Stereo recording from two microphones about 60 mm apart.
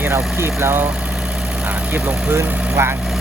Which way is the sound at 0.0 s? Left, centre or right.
Right.